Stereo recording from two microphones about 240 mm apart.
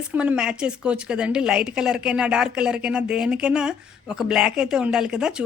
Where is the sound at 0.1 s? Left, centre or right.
Centre.